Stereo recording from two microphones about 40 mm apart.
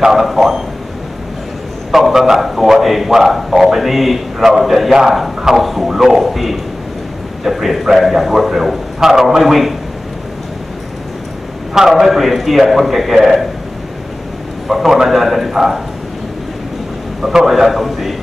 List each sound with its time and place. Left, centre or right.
0.0 s a man's voice: centre
1.9 s a man's voice: centre
9.1 s a man's voice: centre
9.4 s a man's voice: centre
11.7 s a man's voice: centre
14.7 s a man's voice: centre
17.2 s a man's voice: centre